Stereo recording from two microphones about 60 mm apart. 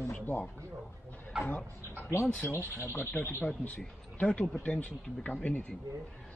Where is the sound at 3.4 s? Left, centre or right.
Left.